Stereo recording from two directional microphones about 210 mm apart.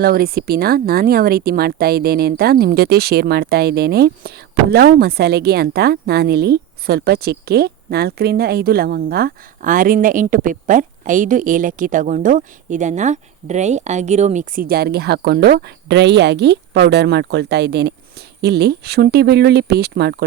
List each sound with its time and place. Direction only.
0.0 s speech: 45° right (ahead or behind)